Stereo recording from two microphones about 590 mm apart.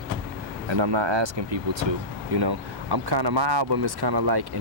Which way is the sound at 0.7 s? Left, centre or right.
Right.